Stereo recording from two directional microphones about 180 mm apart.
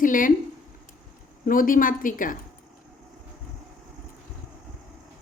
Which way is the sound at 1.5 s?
50° left (ahead or behind).